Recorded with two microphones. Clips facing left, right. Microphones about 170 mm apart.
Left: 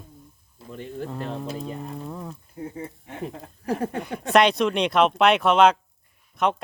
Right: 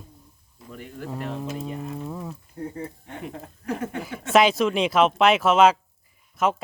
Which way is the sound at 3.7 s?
35° left (ahead or behind).